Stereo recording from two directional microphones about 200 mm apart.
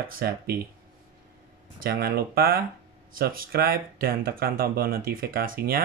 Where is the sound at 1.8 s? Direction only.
50° right (ahead or behind).